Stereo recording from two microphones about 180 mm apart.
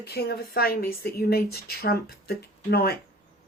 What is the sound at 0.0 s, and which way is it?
A woman's voice, 60° left (ahead or behind).